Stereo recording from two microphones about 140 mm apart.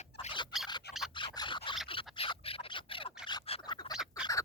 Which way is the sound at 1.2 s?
35° left (ahead or behind).